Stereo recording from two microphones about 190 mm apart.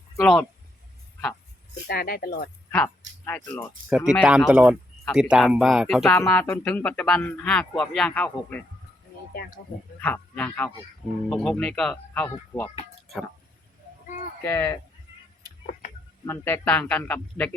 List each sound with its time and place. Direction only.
0.2 s speech: centre (ahead or behind)
1.9 s speech: 55° left (ahead or behind)
3.2 s speech: 10° left (ahead or behind)
3.8 s speech: 5° right (ahead or behind)
6.1 s speech: 10° left (ahead or behind)
10.0 s speech: 5° left (ahead or behind)
14.4 s speech: 15° left (ahead or behind)
16.2 s speech: 15° left (ahead or behind)